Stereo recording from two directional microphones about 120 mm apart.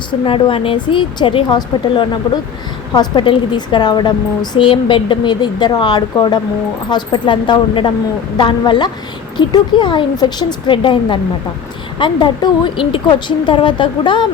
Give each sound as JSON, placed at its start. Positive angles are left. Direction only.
{"t": 0.3, "sound": "speech", "side_deg": 45}